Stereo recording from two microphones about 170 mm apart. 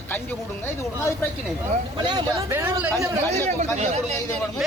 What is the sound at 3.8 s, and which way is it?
Speech, 40° right (ahead or behind).